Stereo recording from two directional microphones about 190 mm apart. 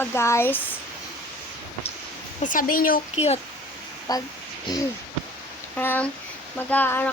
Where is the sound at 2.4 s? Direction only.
45° left (ahead or behind).